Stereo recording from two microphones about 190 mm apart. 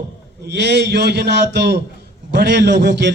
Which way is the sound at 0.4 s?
60° right (ahead or behind).